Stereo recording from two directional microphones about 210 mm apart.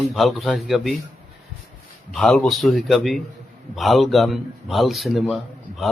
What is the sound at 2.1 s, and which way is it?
A man's voice, centre (ahead or behind).